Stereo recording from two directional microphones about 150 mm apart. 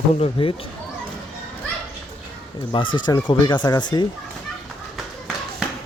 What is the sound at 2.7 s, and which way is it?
Speech, 30° left (ahead or behind).